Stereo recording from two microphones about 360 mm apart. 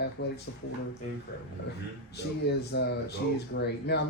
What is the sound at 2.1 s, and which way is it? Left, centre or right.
Speech, left.